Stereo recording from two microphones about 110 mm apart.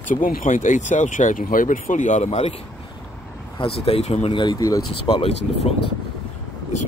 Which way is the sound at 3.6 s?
60° left (ahead or behind).